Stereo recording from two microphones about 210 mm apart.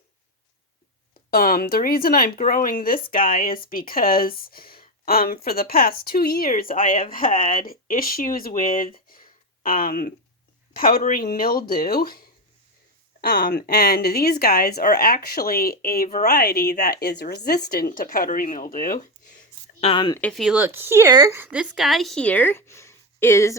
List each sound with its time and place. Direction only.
1.3 s speech: 45° left (ahead or behind)
13.2 s speech: 45° left (ahead or behind)
19.8 s speech: 25° left (ahead or behind)
20.1 s speech: 5° left (ahead or behind)